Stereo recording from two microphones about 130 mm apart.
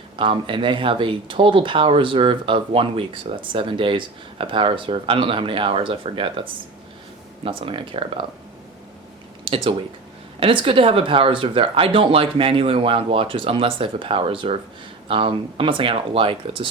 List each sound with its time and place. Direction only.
0.2 s speech: 40° right (ahead or behind)
9.4 s speech: 45° right (ahead or behind)